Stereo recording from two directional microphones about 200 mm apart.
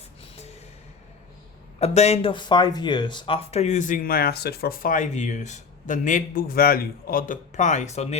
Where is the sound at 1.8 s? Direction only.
35° left (ahead or behind).